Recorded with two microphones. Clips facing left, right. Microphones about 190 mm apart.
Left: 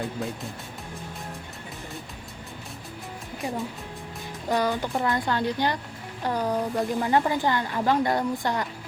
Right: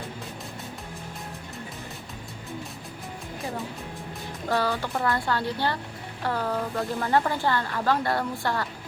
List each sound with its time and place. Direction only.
4.4 s speech: 15° left (ahead or behind)